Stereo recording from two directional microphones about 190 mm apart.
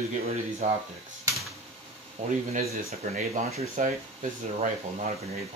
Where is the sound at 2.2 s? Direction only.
35° right (ahead or behind).